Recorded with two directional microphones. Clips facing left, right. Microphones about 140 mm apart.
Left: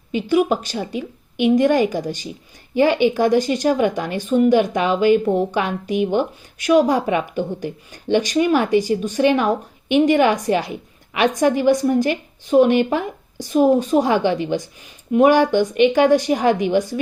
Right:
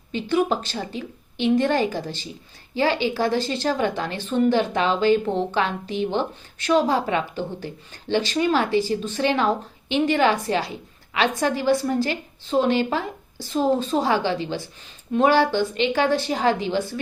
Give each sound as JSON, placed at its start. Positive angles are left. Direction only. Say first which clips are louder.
{"t": 0.1, "sound": "speech", "louder": "left 4 dB", "side_deg": 10}